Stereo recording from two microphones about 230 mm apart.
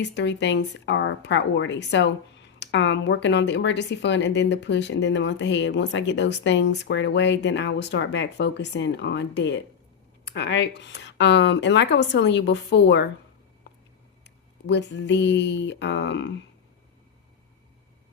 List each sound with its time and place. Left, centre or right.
0.0 s a woman's voice: left
14.3 s speech: left